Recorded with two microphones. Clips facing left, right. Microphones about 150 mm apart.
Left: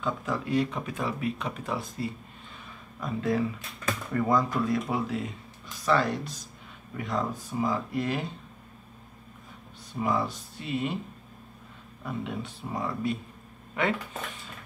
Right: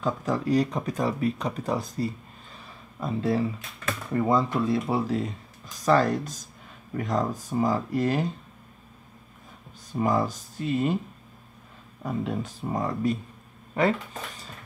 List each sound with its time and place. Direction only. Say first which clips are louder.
0.0 s speech: right 4 dB; 40° right (ahead or behind)
10.0 s speech: right 3 dB; 45° right (ahead or behind)
12.0 s speech: right 5 dB; 40° right (ahead or behind)